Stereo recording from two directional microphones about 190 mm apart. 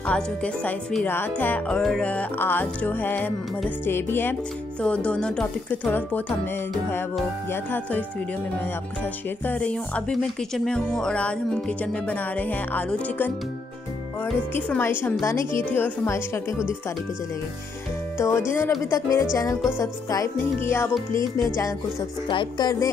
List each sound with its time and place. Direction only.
0.0 s speech: 5° left (ahead or behind)
9.5 s speech: 5° left (ahead or behind)
18.1 s speech: 15° left (ahead or behind)
22.3 s music: 25° left (ahead or behind)